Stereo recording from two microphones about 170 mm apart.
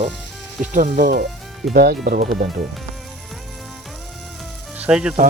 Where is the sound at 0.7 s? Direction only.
50° right (ahead or behind).